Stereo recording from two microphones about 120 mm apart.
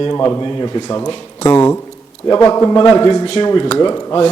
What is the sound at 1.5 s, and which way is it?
A man's voice, 15° left (ahead or behind).